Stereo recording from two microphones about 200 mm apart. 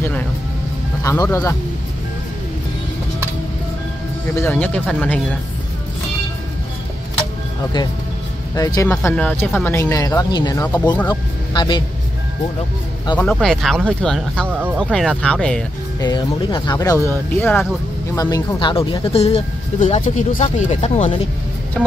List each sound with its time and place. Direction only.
1.0 s speech: 15° left (ahead or behind)
4.3 s speech: 10° left (ahead or behind)
8.5 s speech: 20° left (ahead or behind)
13.2 s speech: 5° left (ahead or behind)
16.0 s speech: 20° left (ahead or behind)
21.8 s music: 5° left (ahead or behind)